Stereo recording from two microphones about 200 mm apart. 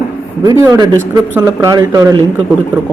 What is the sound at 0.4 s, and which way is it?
Speech, 15° right (ahead or behind).